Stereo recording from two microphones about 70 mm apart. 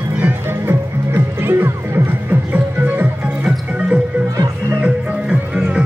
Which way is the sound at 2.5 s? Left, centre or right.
Right.